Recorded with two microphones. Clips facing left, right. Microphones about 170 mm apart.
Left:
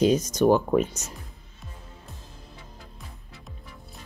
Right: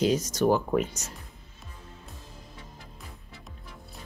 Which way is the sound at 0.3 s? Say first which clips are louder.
Left 4 dB; 20° left (ahead or behind).